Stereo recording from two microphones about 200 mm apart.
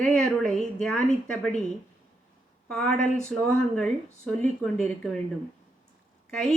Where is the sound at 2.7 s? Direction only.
5° left (ahead or behind).